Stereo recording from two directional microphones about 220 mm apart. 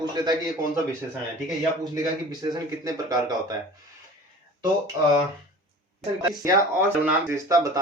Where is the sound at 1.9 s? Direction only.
15° right (ahead or behind).